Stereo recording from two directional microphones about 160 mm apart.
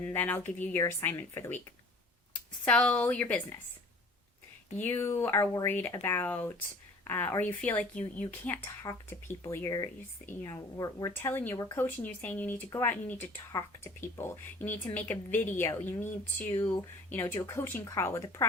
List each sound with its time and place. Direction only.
0.0 s speech: 10° left (ahead or behind)
4.8 s speech: 15° left (ahead or behind)